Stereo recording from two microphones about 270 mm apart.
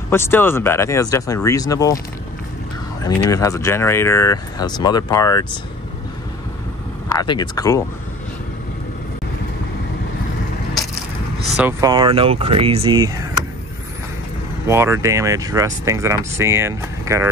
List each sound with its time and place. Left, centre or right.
0.1 s speech: centre
3.0 s speech: centre
7.2 s speech: centre
11.5 s speech: centre
14.7 s speech: centre